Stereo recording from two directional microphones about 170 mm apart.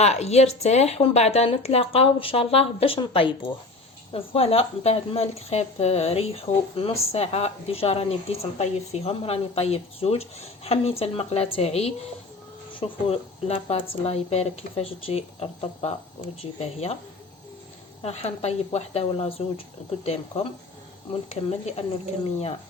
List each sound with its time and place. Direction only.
0.0 s speech: 40° left (ahead or behind)
18.0 s speech: 40° left (ahead or behind)